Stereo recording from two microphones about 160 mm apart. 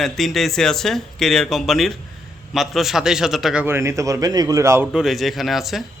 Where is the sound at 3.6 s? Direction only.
15° right (ahead or behind).